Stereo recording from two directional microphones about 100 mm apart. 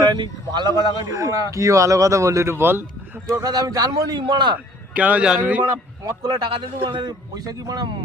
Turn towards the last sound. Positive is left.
turn(degrees=-45)  # may be behind; listen again after turning